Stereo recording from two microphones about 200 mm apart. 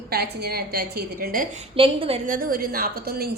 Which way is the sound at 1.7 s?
25° right (ahead or behind).